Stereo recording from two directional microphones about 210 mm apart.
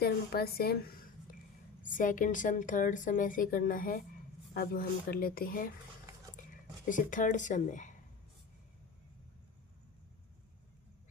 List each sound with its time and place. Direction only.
0.0 s a woman's voice: 45° left (ahead or behind)
1.8 s a woman's voice: 40° left (ahead or behind)
6.8 s a woman's voice: 40° left (ahead or behind)